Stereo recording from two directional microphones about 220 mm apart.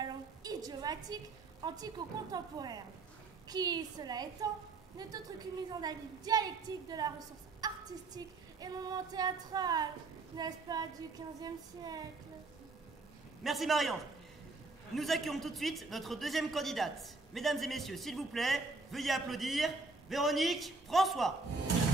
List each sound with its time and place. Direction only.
0.0 s a woman's voice: 15° right (ahead or behind)
13.4 s a man's voice: centre (ahead or behind)
15.0 s a man's voice: centre (ahead or behind)